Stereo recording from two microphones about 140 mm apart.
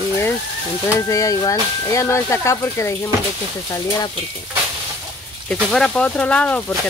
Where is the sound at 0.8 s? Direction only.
25° left (ahead or behind).